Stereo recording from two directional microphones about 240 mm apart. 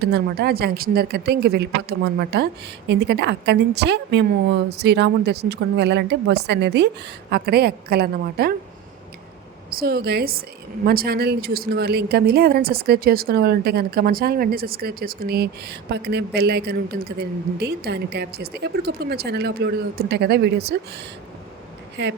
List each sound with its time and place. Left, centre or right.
0.0 s speech: right
9.6 s a woman's voice: right
22.0 s speech: right